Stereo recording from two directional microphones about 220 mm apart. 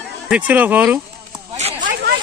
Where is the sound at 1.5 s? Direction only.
35° right (ahead or behind).